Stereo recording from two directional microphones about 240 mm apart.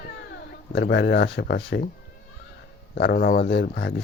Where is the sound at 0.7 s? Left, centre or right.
Left.